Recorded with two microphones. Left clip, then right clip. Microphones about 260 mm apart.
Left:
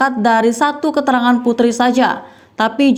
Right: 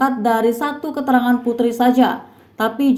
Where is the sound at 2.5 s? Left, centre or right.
Left.